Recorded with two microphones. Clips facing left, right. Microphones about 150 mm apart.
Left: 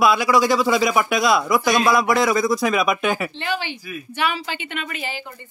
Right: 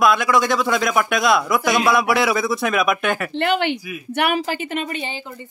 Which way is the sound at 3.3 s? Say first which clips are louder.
Right 7 dB; 60° right (ahead or behind).